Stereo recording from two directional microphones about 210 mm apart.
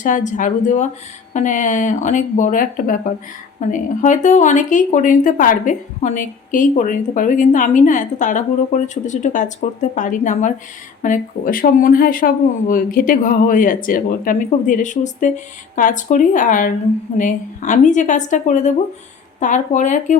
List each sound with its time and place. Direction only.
0.0 s speech: 35° left (ahead or behind)